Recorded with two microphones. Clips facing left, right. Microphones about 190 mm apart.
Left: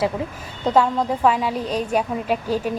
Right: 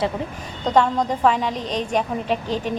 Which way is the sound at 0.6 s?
5° left (ahead or behind).